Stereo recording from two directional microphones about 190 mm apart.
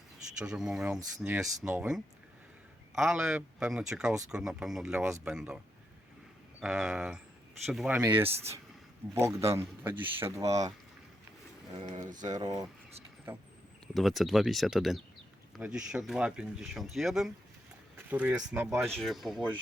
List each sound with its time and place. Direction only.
0.3 s a man's voice: 5° right (ahead or behind)
6.6 s a man's voice: 5° right (ahead or behind)
8.3 s speech: 35° right (ahead or behind)
9.1 s a man's voice: 15° right (ahead or behind)
11.9 s speech: 40° right (ahead or behind)
12.4 s a man's voice: 20° right (ahead or behind)
13.8 s speech: centre (ahead or behind)
18.9 s speech: centre (ahead or behind)